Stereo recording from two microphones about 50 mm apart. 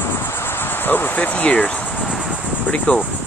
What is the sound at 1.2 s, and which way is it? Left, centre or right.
Speech, left.